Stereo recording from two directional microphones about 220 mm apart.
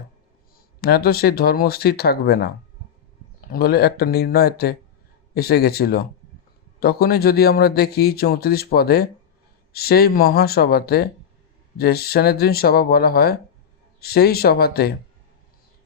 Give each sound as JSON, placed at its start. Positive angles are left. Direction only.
{"t": 0.8, "sound": "a man's voice", "side_deg": 45}
{"t": 3.5, "sound": "a man's voice", "side_deg": 45}